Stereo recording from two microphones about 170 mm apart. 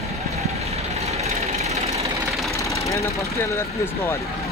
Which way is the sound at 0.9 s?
40° right (ahead or behind).